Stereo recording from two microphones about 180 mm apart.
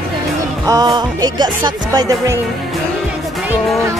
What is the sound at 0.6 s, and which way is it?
Music, 20° right (ahead or behind).